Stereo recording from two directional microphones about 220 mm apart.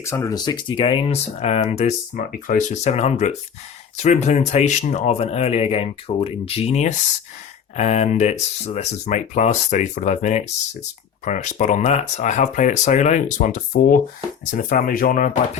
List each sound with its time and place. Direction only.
0.0 s speech: 15° left (ahead or behind); by 15.3 s 35° left (ahead or behind)